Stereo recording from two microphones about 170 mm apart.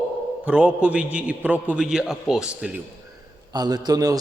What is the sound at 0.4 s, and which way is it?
A man's voice, 10° right (ahead or behind).